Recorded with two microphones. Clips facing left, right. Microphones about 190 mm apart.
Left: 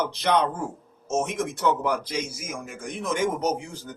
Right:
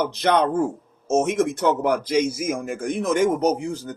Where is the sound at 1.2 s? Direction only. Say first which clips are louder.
Right 6 dB; 45° right (ahead or behind).